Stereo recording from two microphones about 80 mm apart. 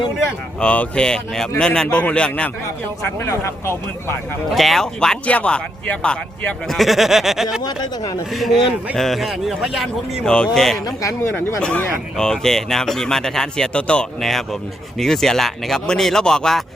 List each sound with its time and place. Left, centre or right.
0.6 s speech: centre
3.0 s speech: left
4.5 s speech: centre
6.7 s speech: centre
7.6 s speech: left
8.3 s speech: centre
10.2 s speech: centre
11.2 s speech: left
11.6 s speech: centre
14.2 s speech: centre